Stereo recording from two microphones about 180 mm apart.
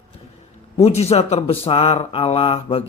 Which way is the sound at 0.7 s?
35° left (ahead or behind).